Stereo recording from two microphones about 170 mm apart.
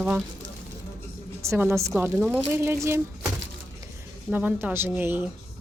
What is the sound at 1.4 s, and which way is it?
Speech, 15° right (ahead or behind).